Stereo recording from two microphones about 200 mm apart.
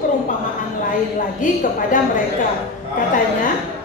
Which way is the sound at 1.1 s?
40° left (ahead or behind).